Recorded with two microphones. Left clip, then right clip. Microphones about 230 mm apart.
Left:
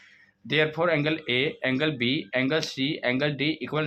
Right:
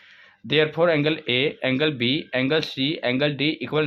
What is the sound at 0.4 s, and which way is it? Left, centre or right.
Speech, right.